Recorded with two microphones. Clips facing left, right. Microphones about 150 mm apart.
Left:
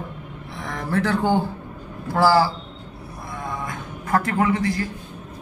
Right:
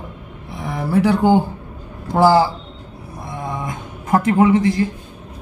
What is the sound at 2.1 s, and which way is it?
Speech, 20° right (ahead or behind).